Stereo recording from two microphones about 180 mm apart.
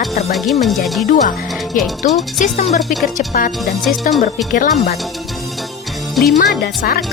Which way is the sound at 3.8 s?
Centre (ahead or behind).